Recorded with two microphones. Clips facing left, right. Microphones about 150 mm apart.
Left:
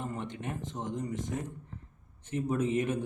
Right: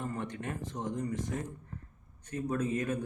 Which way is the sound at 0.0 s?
20° left (ahead or behind).